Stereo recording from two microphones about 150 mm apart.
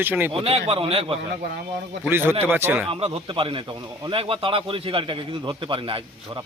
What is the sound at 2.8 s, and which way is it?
Speech, 40° right (ahead or behind).